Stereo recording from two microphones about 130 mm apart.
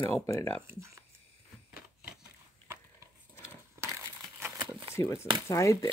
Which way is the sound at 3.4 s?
20° right (ahead or behind).